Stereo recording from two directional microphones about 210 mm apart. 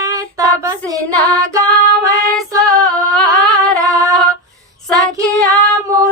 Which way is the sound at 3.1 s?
Centre (ahead or behind).